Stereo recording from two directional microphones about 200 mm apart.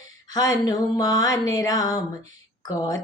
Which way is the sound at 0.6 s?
20° left (ahead or behind).